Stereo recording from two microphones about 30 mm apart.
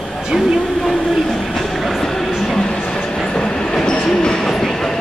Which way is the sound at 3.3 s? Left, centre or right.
Left.